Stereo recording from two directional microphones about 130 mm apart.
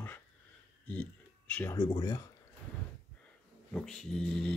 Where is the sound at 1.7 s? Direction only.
30° left (ahead or behind).